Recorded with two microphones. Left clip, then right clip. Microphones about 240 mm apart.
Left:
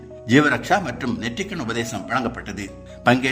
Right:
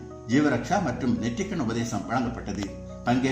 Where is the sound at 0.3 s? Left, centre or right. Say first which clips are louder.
Left 7 dB; left.